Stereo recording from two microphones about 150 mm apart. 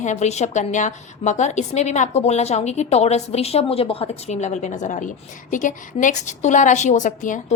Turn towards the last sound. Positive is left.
turn(degrees=55)  # may be behind; listen again after turning